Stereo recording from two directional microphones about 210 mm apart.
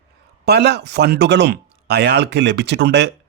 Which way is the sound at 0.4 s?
50° right (ahead or behind).